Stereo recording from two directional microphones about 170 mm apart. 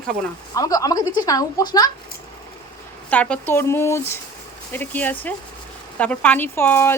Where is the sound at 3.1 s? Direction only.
5° left (ahead or behind).